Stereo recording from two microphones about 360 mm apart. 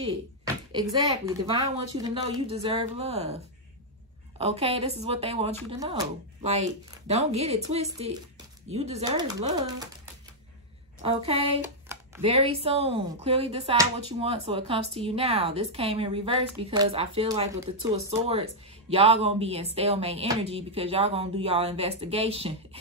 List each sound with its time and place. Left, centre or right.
2.0 s speech: centre
11.0 s speech: centre